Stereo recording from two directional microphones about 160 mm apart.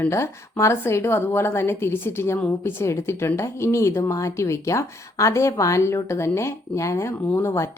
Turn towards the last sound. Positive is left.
turn(degrees=15)  # may be behind; listen again after turning